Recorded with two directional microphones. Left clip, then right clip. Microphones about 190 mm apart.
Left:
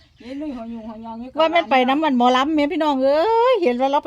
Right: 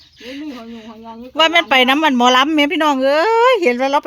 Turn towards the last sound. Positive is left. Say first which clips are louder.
# right 3 dB
turn(degrees=-15)  # may be behind; listen again after turning